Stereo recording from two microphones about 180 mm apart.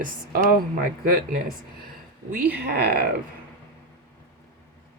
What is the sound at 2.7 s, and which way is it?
Speech, 65° right (ahead or behind).